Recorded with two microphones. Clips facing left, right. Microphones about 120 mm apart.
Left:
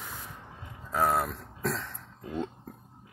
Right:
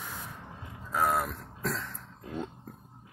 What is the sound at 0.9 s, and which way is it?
Speech, 30° left (ahead or behind).